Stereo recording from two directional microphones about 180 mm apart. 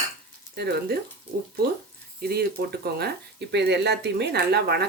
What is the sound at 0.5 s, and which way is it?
Speech, 65° right (ahead or behind).